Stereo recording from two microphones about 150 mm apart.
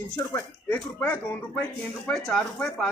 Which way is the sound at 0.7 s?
10° left (ahead or behind).